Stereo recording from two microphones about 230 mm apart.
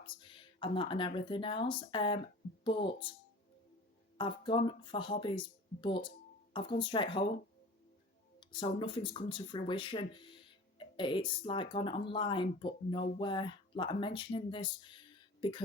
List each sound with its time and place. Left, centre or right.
0.0 s speech: left
4.2 s speech: left
8.4 s speech: left